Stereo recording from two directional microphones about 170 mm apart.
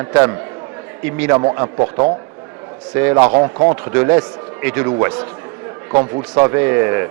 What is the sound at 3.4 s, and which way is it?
Speech, 25° right (ahead or behind).